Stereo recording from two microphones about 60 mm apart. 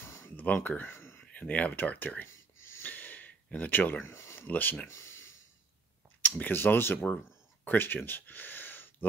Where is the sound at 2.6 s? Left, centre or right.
Left.